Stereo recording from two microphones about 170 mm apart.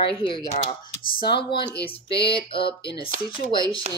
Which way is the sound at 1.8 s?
75° left (ahead or behind).